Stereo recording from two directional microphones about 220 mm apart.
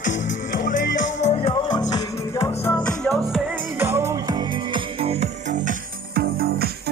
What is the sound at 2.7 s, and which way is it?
Music, 5° left (ahead or behind).